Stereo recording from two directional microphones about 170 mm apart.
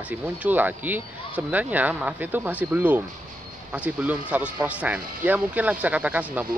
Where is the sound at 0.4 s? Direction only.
10° right (ahead or behind).